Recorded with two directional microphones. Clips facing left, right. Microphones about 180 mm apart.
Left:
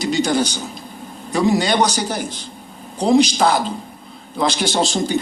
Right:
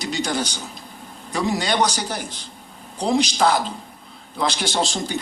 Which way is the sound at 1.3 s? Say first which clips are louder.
Left 6 dB; 25° left (ahead or behind).